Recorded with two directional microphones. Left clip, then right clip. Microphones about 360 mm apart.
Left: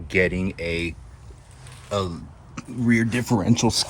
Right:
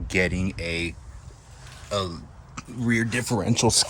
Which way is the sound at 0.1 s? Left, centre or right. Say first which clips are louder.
Left 3 dB; centre.